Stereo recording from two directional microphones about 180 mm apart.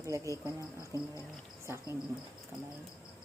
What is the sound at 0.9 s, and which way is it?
Insect, 20° right (ahead or behind).